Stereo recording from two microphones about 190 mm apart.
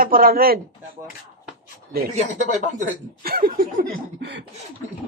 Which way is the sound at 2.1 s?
35° right (ahead or behind).